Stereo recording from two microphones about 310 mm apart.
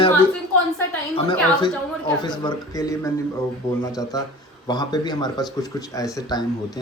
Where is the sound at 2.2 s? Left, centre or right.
Centre.